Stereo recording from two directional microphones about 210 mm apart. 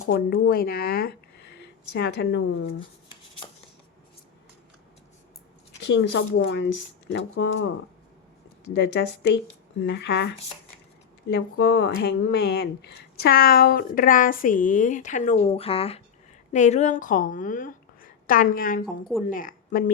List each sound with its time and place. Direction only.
0.1 s speech: 45° left (ahead or behind)
5.8 s speech: 55° left (ahead or behind)
8.7 s speech: 55° left (ahead or behind)
11.3 s a woman's voice: 55° left (ahead or behind); by 19.8 s 40° left (ahead or behind)